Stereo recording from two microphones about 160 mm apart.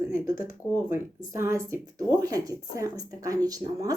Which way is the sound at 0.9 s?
15° right (ahead or behind).